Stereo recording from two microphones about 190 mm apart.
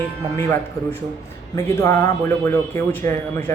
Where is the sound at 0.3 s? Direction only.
10° left (ahead or behind).